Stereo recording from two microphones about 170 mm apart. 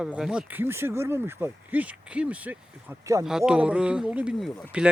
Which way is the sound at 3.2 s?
5° right (ahead or behind).